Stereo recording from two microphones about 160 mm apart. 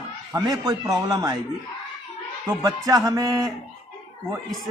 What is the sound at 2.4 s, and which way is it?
Speech, 20° right (ahead or behind).